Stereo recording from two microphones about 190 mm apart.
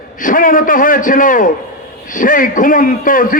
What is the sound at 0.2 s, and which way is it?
A man's voice, 45° left (ahead or behind).